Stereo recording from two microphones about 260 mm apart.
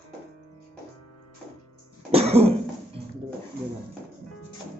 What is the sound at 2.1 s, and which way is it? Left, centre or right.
Cough, right.